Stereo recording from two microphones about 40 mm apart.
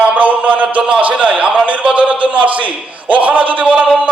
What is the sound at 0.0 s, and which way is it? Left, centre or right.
Music, right.